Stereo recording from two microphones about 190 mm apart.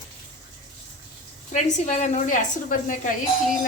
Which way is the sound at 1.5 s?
40° left (ahead or behind).